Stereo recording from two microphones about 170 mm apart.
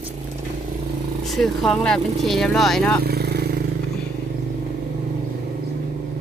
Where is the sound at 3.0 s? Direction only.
70° right (ahead or behind).